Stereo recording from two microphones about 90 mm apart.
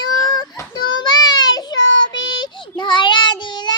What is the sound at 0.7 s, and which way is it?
Child singing, 50° left (ahead or behind).